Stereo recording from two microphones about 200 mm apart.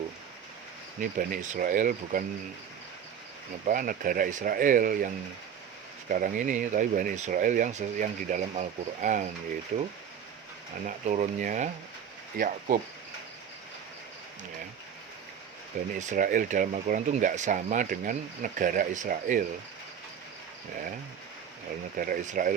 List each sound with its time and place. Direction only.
1.2 s speech: 45° right (ahead or behind)
3.7 s speech: 45° right (ahead or behind)
6.1 s speech: 40° right (ahead or behind)
16.0 s speech: 40° right (ahead or behind)
21.9 s speech: 45° right (ahead or behind)